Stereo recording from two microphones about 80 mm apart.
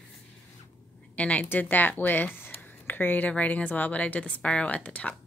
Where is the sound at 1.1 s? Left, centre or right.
Centre.